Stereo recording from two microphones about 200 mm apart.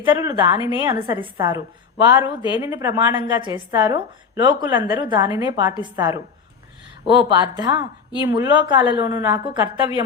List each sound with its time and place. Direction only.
0.0 s a woman's voice: 15° right (ahead or behind)
7.3 s a woman's voice: 20° right (ahead or behind)